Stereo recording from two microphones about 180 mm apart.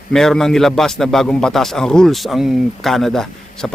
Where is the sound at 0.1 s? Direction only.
5° left (ahead or behind).